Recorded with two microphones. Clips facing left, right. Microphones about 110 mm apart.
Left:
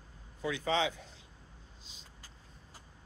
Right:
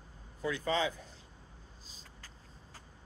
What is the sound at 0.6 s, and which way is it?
Speech, 90° left.